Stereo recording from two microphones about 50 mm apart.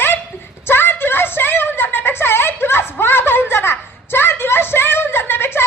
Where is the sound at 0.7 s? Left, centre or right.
Left.